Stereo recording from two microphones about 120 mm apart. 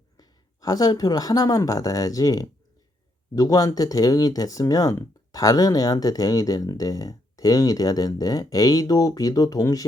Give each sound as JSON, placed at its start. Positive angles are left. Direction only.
{"t": 0.2, "sound": "speech", "side_deg": 30}